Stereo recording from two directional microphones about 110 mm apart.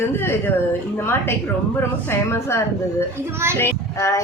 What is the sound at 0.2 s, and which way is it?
Speech, 20° left (ahead or behind).